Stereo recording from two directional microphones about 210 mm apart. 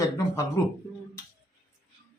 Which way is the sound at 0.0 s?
15° left (ahead or behind).